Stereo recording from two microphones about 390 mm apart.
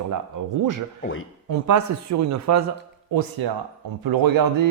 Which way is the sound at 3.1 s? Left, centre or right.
Right.